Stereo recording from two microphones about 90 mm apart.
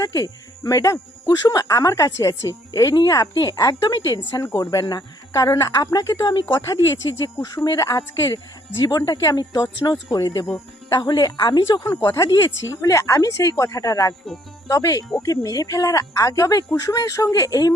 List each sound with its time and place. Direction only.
0.0 s speech: 40° left (ahead or behind)
12.0 s speech: 35° left (ahead or behind)